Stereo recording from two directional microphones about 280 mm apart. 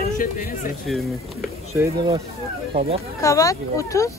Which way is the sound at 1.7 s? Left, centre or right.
Centre.